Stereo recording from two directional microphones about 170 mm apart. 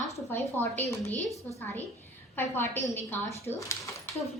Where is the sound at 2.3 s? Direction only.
15° left (ahead or behind).